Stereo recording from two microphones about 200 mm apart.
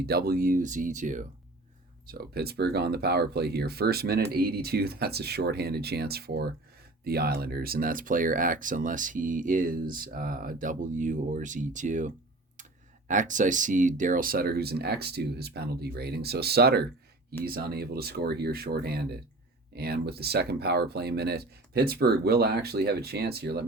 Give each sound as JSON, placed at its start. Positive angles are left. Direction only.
{"t": 0.0, "sound": "speech", "side_deg": -50}
{"t": 2.0, "sound": "speech", "side_deg": -50}